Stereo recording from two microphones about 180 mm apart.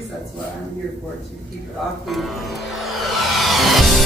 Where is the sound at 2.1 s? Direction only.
Centre (ahead or behind).